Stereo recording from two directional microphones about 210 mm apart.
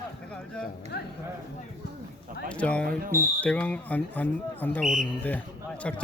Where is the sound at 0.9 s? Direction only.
50° left (ahead or behind).